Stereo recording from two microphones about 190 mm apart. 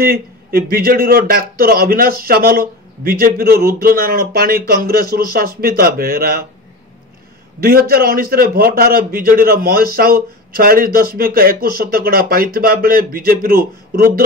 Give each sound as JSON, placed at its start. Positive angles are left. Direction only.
{"t": 0.0, "sound": "a man's voice", "side_deg": -50}
{"t": 7.6, "sound": "a man's voice", "side_deg": -50}